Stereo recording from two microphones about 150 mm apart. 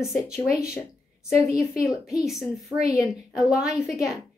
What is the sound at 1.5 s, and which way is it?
Speech, centre (ahead or behind).